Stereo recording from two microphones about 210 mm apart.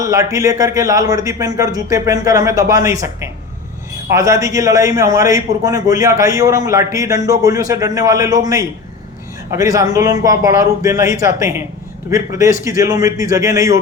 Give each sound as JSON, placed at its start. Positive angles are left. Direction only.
{"t": 0.0, "sound": "a man's voice", "side_deg": -15}